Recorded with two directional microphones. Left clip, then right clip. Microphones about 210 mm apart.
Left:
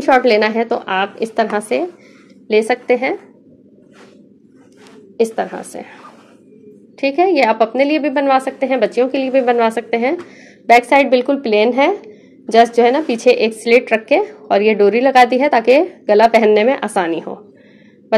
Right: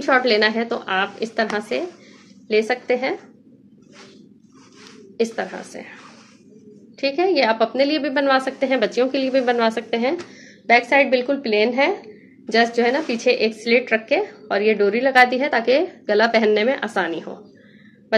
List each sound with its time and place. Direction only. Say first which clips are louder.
0.0 s speech: left 5 dB; 30° left (ahead or behind)
5.1 s speech: left 6 dB; 30° left (ahead or behind)
7.0 s a woman's voice: left 5 dB; 30° left (ahead or behind)
10.7 s speech: left 5 dB; 35° left (ahead or behind)